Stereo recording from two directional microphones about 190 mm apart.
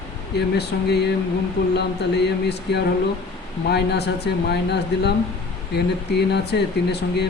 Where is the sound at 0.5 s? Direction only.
60° left (ahead or behind).